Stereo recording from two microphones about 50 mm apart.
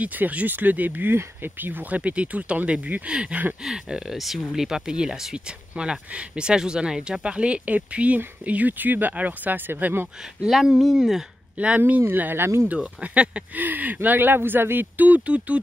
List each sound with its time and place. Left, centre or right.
0.0 s speech: right
3.6 s speech: centre; by 10.0 s right
10.4 s speech: centre
11.5 s speech: right
11.8 s speech: right
13.0 s speech: right
13.6 s speech: right
15.0 s speech: right